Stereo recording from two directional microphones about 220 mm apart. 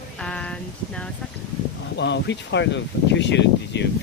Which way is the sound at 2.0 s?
55° left (ahead or behind).